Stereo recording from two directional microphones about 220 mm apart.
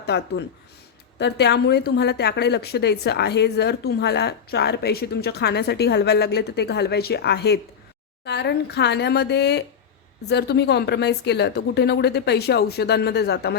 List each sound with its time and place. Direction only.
0.0 s speech: 50° left (ahead or behind)